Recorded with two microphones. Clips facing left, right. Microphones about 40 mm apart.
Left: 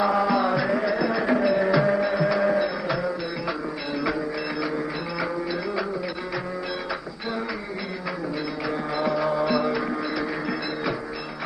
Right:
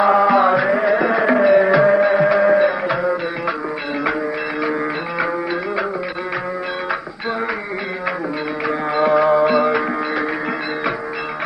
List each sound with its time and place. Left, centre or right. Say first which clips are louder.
0.0 s music: right 8 dB; right
8.6 s music: right 9 dB; right